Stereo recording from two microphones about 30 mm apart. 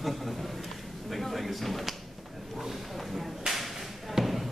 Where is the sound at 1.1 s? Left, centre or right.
Centre.